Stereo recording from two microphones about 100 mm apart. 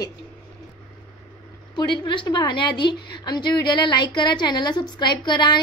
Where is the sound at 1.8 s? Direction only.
50° left (ahead or behind).